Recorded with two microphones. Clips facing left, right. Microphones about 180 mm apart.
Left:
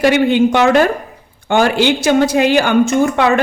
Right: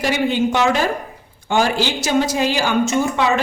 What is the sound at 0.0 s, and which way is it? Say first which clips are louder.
A woman's voice: left 7 dB; 60° left (ahead or behind).